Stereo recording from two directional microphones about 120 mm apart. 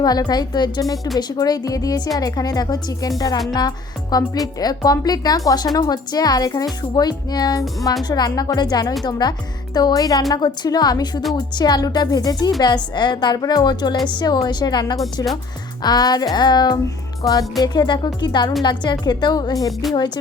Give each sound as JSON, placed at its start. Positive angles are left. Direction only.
{"t": 0.0, "sound": "a woman's voice", "side_deg": 35}
{"t": 14.9, "sound": "speech", "side_deg": 0}
{"t": 15.8, "sound": "a woman's voice", "side_deg": 35}